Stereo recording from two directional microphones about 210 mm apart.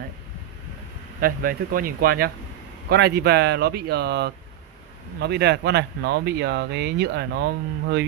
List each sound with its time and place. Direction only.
1.2 s speech: 45° right (ahead or behind)